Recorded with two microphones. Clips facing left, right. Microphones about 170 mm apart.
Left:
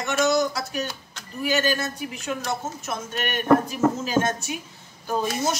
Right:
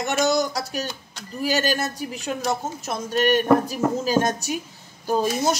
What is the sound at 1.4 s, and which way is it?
Speech, 40° right (ahead or behind).